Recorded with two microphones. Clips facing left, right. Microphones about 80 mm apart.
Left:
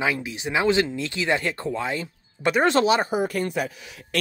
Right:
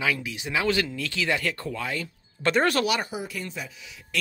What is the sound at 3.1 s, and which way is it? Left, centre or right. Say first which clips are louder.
Speech: left 10 dB; left.